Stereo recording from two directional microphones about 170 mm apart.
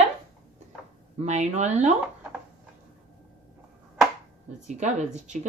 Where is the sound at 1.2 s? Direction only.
45° right (ahead or behind).